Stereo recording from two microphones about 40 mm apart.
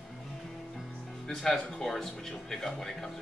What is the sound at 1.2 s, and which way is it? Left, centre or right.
Music, centre.